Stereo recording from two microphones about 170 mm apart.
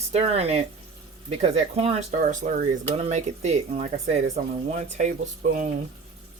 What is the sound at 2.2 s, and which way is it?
Speech, 50° right (ahead or behind).